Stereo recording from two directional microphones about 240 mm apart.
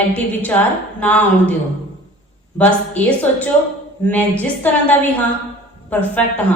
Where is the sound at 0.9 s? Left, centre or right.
Centre.